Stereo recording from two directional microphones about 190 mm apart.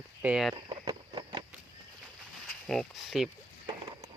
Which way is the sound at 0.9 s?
25° right (ahead or behind).